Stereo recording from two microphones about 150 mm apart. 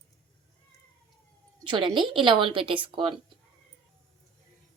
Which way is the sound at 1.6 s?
30° right (ahead or behind).